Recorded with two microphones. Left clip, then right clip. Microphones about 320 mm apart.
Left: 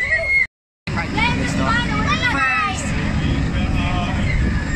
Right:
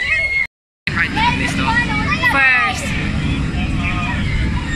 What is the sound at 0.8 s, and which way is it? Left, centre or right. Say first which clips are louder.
Vehicle: right 5 dB; centre.